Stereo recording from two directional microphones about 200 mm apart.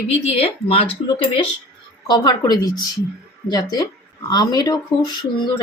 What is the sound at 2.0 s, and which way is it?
Speech, 20° left (ahead or behind).